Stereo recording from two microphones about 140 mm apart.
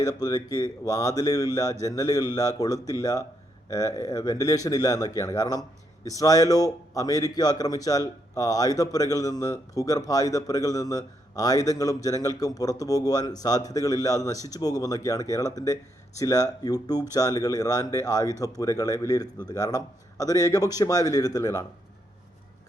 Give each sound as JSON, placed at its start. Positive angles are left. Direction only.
{"t": 0.0, "sound": "a man's voice", "side_deg": 25}